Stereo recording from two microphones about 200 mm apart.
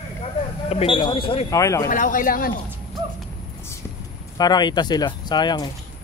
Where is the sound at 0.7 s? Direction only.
30° left (ahead or behind).